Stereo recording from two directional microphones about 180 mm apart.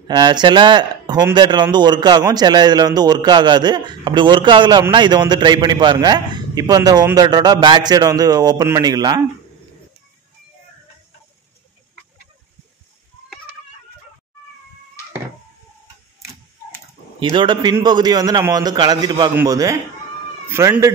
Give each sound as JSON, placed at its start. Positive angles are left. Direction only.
{"t": 0.1, "sound": "speech", "side_deg": -25}
{"t": 17.2, "sound": "speech", "side_deg": -25}